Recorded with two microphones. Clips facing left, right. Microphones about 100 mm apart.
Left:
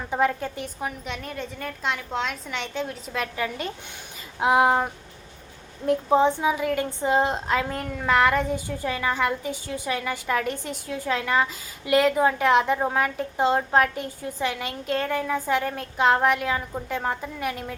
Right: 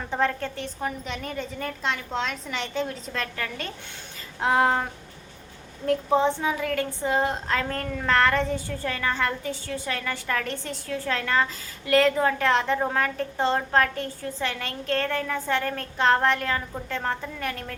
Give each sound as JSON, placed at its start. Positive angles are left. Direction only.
{"t": 0.1, "sound": "a woman's voice", "side_deg": 10}